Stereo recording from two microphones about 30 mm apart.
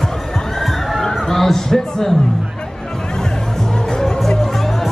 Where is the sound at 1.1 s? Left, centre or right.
Centre.